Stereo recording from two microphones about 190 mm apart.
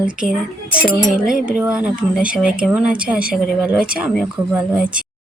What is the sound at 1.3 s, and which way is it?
Speech, 5° right (ahead or behind).